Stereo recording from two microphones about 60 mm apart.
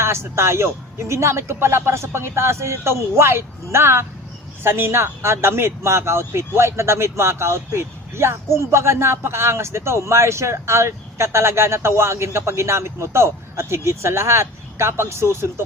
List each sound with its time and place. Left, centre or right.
0.0 s a man's voice: right